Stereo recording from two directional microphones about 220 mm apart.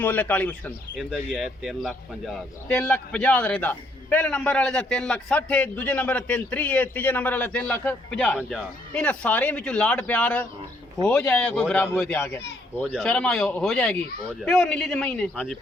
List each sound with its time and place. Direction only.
0.0 s speech: 10° left (ahead or behind)
8.4 s a man's voice: 5° right (ahead or behind)